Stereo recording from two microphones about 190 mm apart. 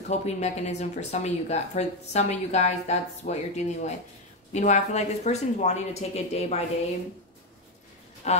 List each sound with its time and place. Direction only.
0.1 s speech: 35° left (ahead or behind)
8.2 s speech: 35° left (ahead or behind)